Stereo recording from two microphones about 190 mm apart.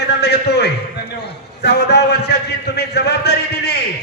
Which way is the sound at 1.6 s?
60° left (ahead or behind).